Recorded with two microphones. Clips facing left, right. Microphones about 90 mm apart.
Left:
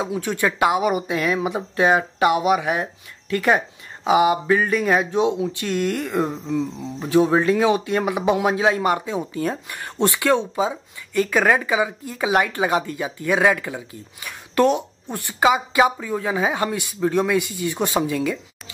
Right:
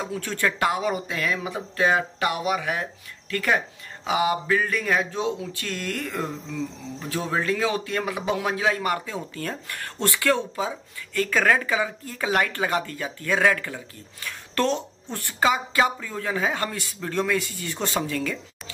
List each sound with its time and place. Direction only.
0.0 s speech: 15° left (ahead or behind)